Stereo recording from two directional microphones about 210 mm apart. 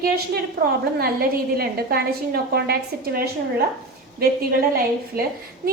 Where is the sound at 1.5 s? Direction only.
45° right (ahead or behind).